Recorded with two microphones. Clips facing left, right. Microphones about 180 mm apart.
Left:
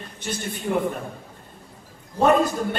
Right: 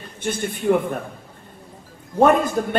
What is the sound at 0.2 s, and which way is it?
Speech, 55° right (ahead or behind).